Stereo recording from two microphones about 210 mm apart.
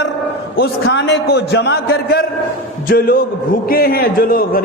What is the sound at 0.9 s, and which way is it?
A man's voice, 55° left (ahead or behind).